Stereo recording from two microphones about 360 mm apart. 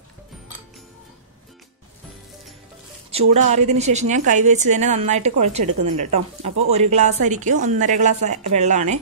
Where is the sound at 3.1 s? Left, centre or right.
Centre.